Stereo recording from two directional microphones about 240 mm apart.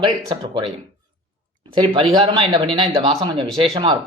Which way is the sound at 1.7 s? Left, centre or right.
Right.